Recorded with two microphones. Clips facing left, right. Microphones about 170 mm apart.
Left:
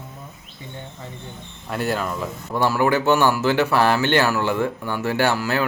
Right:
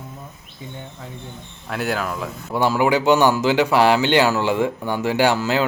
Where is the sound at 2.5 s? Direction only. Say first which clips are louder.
Right 1 dB; 15° right (ahead or behind).